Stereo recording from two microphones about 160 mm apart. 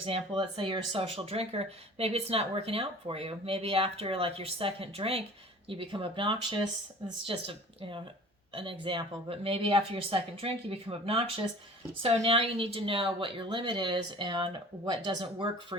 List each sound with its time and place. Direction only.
0.0 s speech: 35° right (ahead or behind)